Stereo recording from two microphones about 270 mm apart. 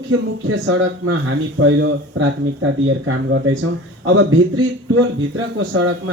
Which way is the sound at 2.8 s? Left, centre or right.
Right.